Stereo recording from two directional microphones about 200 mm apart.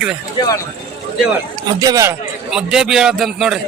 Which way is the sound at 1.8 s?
15° right (ahead or behind).